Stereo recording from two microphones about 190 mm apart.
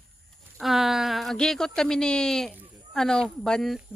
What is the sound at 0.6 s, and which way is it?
Speech, centre (ahead or behind).